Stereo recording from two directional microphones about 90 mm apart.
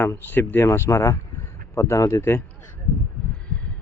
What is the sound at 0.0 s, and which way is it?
Speech, 25° left (ahead or behind).